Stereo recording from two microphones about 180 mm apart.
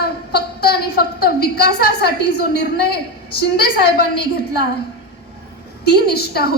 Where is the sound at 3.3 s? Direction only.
60° left (ahead or behind).